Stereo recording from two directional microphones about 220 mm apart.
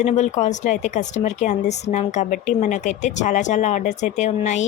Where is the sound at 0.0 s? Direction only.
30° left (ahead or behind).